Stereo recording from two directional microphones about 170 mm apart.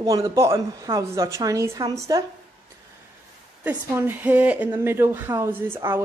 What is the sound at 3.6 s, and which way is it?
Speech, 10° right (ahead or behind).